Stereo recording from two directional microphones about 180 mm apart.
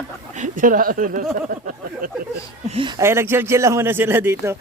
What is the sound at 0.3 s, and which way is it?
Speech, 45° right (ahead or behind).